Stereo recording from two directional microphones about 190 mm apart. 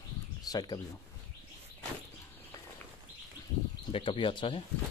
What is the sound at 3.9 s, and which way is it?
Speech, 25° left (ahead or behind).